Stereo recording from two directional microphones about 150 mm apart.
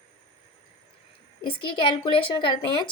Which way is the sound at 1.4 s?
35° left (ahead or behind).